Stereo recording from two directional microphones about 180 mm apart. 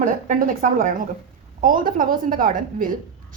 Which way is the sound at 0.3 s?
50° right (ahead or behind).